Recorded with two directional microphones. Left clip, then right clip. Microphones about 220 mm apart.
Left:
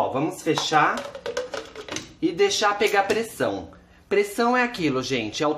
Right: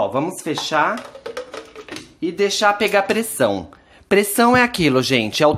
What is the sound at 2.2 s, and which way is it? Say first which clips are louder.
Speech: right 3 dB; 40° right (ahead or behind).